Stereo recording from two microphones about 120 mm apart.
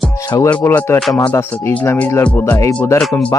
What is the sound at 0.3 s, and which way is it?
Speech, 25° left (ahead or behind).